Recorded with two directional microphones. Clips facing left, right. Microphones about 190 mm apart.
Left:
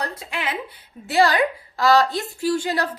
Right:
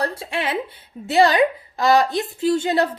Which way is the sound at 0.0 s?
30° right (ahead or behind).